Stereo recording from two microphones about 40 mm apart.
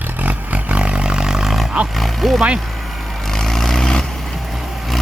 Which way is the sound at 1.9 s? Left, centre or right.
Centre.